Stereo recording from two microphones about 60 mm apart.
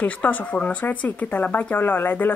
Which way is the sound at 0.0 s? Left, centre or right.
Left.